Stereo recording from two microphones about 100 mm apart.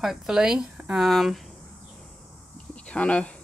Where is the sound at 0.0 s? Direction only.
5° right (ahead or behind).